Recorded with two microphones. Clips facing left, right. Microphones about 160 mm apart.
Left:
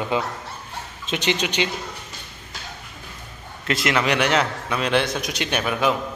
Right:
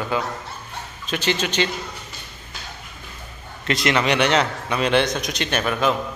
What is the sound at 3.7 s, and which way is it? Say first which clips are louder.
A man's voice: right 1 dB; 5° left (ahead or behind).